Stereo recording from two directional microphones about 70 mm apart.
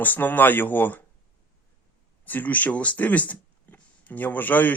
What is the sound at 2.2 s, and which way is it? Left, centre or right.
Speech, left.